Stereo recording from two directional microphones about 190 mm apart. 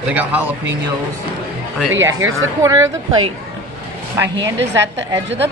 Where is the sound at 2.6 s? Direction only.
15° right (ahead or behind).